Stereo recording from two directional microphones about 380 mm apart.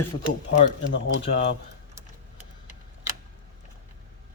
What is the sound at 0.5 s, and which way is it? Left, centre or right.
Speech, left.